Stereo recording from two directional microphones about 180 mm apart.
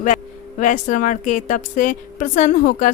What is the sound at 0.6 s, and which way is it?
A woman's voice, 45° left (ahead or behind).